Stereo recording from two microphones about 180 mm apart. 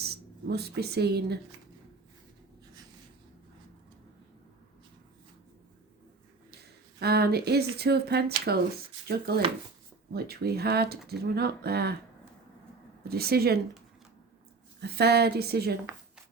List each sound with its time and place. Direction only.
0.0 s speech: 65° right (ahead or behind)
7.0 s speech: 60° right (ahead or behind)
13.1 s speech: 60° right (ahead or behind)
14.8 s speech: 65° right (ahead or behind)